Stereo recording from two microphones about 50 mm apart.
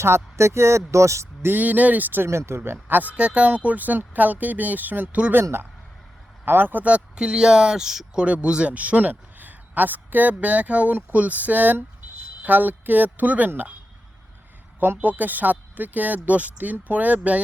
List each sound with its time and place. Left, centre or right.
0.0 s speech: right
1.5 s speech: right
2.5 s speech: right
2.8 s speech: right
5.3 s speech: right
6.8 s speech: right
8.2 s speech: right
14.8 s speech: right